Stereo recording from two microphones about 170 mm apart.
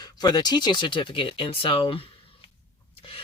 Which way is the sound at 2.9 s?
35° left (ahead or behind).